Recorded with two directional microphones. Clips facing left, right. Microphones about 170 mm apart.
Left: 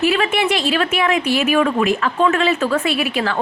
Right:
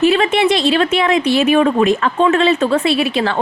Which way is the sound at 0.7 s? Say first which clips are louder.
Right 4 dB; 35° right (ahead or behind).